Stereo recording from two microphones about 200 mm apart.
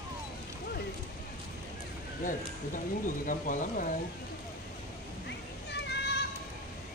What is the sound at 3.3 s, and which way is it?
Speech, 40° left (ahead or behind).